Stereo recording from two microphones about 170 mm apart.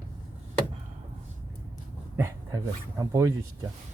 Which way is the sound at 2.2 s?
20° right (ahead or behind).